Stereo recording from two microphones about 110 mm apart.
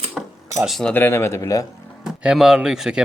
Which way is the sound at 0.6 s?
Centre (ahead or behind).